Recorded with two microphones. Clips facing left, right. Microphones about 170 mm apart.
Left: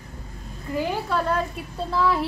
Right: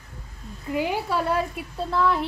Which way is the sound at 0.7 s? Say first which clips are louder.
Even; 15° right (ahead or behind).